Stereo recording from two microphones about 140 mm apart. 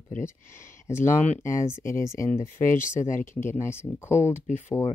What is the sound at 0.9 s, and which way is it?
Speech, 55° left (ahead or behind).